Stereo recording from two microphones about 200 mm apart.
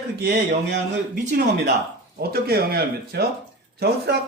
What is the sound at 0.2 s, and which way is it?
A man's voice, 55° right (ahead or behind).